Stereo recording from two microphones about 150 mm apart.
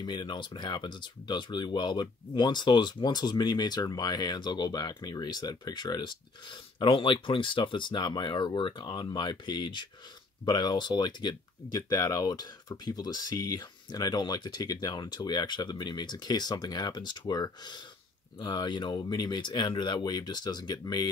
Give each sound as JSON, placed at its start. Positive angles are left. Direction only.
{"t": 0.0, "sound": "speech", "side_deg": 30}